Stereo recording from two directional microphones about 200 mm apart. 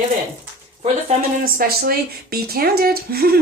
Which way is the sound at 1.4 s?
50° right (ahead or behind).